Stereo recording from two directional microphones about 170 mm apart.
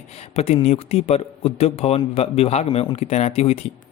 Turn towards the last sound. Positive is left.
turn(degrees=35)  # may be behind; listen again after turning